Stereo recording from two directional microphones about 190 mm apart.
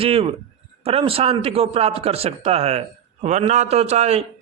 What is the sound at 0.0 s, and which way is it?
Speech, 30° right (ahead or behind).